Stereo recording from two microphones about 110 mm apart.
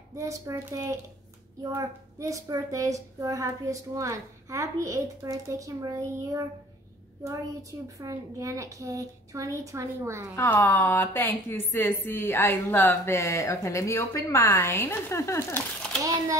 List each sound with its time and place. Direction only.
0.1 s a child's voice: 30° right (ahead or behind)
8.0 s a child's voice: 30° right (ahead or behind)
10.3 s a woman's voice: 20° left (ahead or behind)
16.0 s speech: 30° right (ahead or behind)